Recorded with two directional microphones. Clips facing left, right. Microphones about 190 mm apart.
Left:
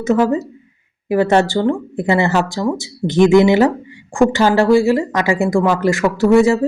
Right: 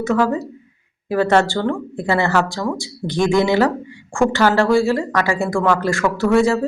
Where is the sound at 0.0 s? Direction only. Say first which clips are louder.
Left 3 dB; 20° left (ahead or behind).